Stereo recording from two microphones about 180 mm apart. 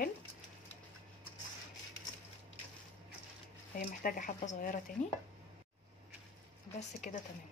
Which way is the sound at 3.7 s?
50° left (ahead or behind).